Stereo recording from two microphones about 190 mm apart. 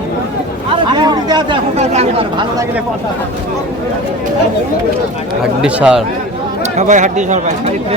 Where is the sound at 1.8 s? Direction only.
35° right (ahead or behind).